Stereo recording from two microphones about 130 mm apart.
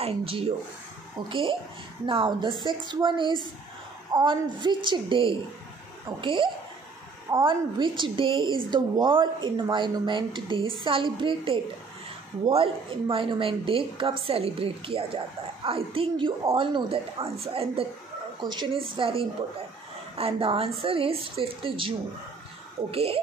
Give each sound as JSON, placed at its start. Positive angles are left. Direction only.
{"t": 0.0, "sound": "a woman's voice", "side_deg": -45}
{"t": 18.4, "sound": "a woman's voice", "side_deg": -35}